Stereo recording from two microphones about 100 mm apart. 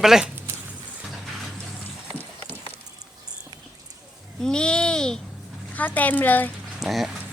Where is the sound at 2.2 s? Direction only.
20° left (ahead or behind).